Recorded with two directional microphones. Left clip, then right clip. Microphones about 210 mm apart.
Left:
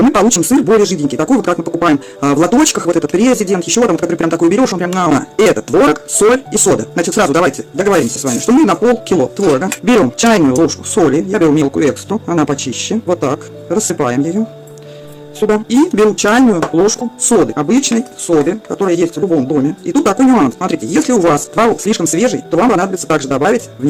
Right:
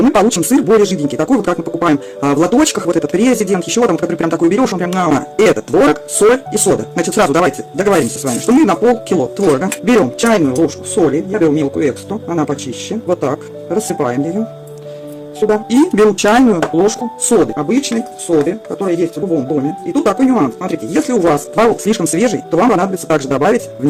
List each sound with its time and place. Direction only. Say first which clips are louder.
0.0 s speech: left 1 dB; 5° left (ahead or behind)
15.4 s speech: even; 10° left (ahead or behind)
15.7 s speech: right 1 dB; 5° right (ahead or behind)
21.8 s speech: left 1 dB; 5° right (ahead or behind)